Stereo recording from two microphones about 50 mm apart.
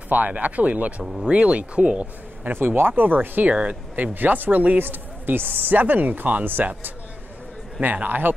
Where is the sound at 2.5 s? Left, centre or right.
Right.